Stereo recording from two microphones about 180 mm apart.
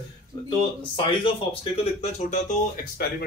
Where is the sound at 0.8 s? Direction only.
25° left (ahead or behind).